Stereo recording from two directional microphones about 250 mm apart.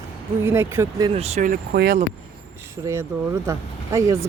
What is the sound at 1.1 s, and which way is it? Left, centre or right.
Speech, right.